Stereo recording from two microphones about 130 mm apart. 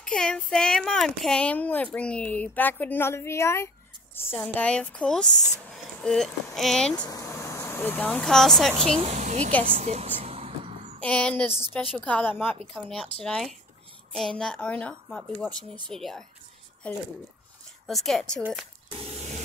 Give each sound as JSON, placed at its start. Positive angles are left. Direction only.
{"t": 0.0, "sound": "a child's voice", "side_deg": 5}
{"t": 7.1, "sound": "speech", "side_deg": 25}
{"t": 9.0, "sound": "speech", "side_deg": -60}
{"t": 9.7, "sound": "music", "side_deg": -65}
{"t": 11.0, "sound": "speech", "side_deg": 10}
{"t": 13.2, "sound": "a woman's voice", "side_deg": 5}